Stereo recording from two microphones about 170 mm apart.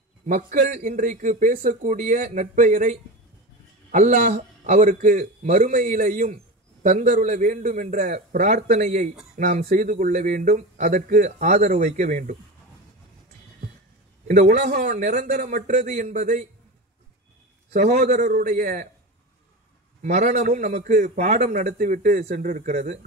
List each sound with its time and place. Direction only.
0.3 s a man's voice: 55° right (ahead or behind)
8.6 s a man's voice: 45° right (ahead or behind)
14.2 s a man's voice: 40° right (ahead or behind)
17.7 s a man's voice: 45° right (ahead or behind)
20.0 s a man's voice: 45° right (ahead or behind)